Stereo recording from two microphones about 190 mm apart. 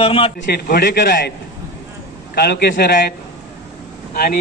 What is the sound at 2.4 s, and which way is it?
Speech, 55° left (ahead or behind).